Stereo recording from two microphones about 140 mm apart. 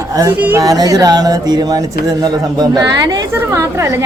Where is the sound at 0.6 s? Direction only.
25° right (ahead or behind).